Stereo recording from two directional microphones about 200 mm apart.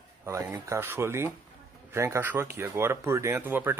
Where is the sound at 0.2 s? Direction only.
15° right (ahead or behind).